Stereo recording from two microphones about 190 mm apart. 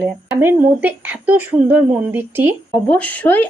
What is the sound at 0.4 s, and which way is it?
Speech, 10° right (ahead or behind).